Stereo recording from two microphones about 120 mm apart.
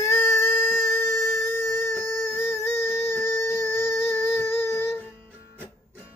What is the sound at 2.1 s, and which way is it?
Music, 25° left (ahead or behind).